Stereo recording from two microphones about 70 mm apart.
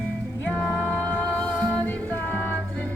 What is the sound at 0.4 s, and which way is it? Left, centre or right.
Music, centre.